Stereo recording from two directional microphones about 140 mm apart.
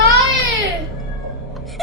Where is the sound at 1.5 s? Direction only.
Centre (ahead or behind).